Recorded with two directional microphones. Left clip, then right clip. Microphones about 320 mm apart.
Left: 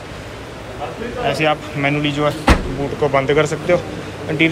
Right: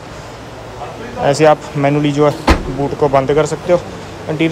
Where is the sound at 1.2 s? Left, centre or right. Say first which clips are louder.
Right 7 dB; centre.